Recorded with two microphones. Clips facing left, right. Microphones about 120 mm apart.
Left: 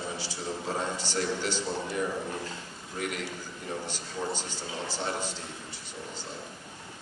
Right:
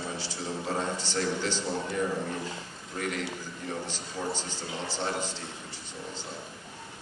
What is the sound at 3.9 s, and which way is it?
A man's voice, 15° left (ahead or behind).